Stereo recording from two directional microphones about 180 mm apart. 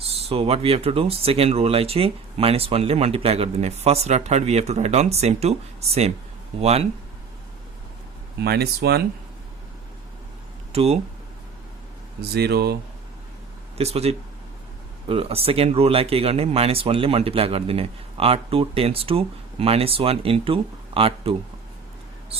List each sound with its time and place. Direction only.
0.0 s speech: 35° right (ahead or behind)
8.4 s speech: 60° right (ahead or behind)
10.7 s speech: 35° right (ahead or behind)
12.3 s speech: 65° right (ahead or behind)
13.7 s speech: 35° right (ahead or behind)